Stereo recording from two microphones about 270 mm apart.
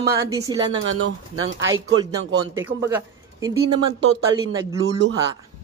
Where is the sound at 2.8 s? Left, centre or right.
Centre.